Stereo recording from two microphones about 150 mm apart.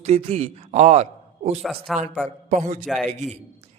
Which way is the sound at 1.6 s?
Centre (ahead or behind).